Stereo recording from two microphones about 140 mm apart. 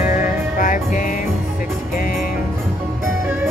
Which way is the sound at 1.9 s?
85° left.